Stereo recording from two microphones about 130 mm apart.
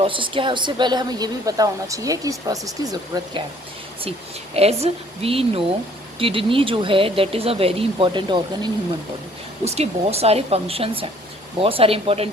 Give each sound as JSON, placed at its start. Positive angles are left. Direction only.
{"t": 0.0, "sound": "a woman's voice", "side_deg": -40}
{"t": 4.5, "sound": "speech", "side_deg": -50}
{"t": 9.6, "sound": "speech", "side_deg": -55}